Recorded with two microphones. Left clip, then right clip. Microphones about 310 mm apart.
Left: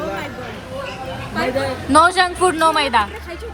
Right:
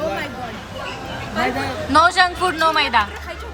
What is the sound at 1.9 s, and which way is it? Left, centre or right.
A woman's voice, centre.